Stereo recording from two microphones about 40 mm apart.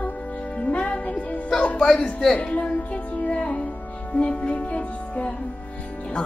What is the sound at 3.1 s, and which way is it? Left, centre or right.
Music, left.